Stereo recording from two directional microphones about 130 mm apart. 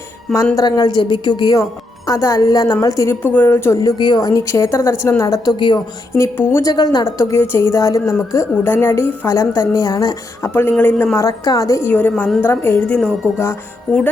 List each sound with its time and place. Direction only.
0.5 s a woman's voice: 30° left (ahead or behind)
6.1 s a woman's voice: 20° left (ahead or behind)
10.5 s a woman's voice: 15° left (ahead or behind)